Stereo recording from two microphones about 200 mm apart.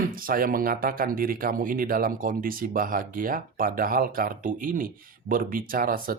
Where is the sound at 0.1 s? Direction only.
45° right (ahead or behind).